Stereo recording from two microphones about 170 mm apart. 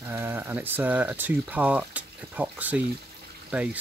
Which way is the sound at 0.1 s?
15° right (ahead or behind).